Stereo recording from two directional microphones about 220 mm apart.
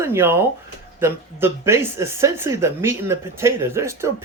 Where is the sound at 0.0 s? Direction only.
10° right (ahead or behind).